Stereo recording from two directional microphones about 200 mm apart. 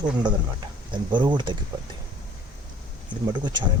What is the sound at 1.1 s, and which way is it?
Speech, 20° right (ahead or behind).